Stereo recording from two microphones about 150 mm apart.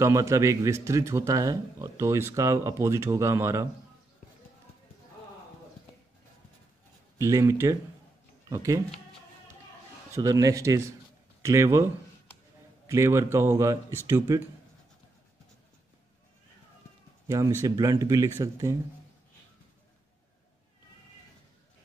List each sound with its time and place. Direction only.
0.0 s speech: 20° right (ahead or behind)
7.2 s speech: 20° right (ahead or behind)
10.1 s speech: 20° right (ahead or behind)
17.3 s speech: 20° right (ahead or behind)